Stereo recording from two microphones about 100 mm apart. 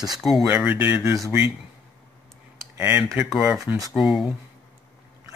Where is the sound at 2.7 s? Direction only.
25° right (ahead or behind).